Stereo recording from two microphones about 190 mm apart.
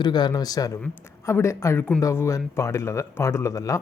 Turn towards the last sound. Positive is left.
turn(degrees=15)  # may be behind; listen again after turning